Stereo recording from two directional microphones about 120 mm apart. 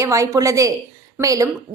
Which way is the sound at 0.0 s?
25° right (ahead or behind).